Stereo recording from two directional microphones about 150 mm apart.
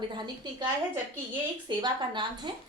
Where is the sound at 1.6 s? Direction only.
30° right (ahead or behind).